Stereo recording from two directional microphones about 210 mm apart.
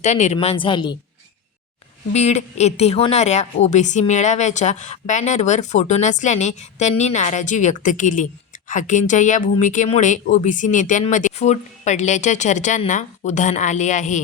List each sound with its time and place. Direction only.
0.0 s a woman's voice: 35° left (ahead or behind)
2.1 s a woman's voice: 30° left (ahead or behind)